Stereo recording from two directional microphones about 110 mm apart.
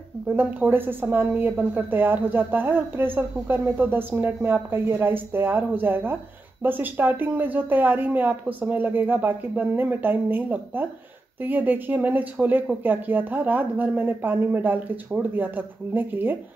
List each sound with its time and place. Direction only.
0.4 s speech: 15° right (ahead or behind)